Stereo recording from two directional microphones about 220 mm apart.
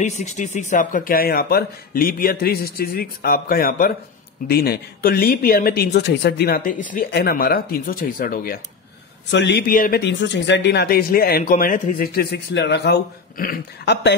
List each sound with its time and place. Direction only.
0.0 s speech: 30° left (ahead or behind)
9.3 s speech: 50° left (ahead or behind)